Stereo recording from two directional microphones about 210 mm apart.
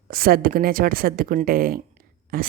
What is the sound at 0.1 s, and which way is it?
Speech, 45° right (ahead or behind).